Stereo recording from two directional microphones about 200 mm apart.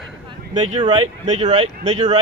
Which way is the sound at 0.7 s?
30° right (ahead or behind).